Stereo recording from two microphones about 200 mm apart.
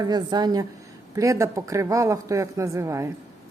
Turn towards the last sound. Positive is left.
turn(degrees=-15)  # may be behind; listen again after turning